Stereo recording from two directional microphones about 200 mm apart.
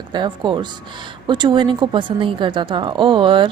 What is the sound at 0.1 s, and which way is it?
A woman's voice, 20° right (ahead or behind).